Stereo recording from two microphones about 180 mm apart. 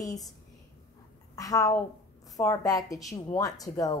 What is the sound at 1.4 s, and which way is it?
A woman's voice, 20° left (ahead or behind).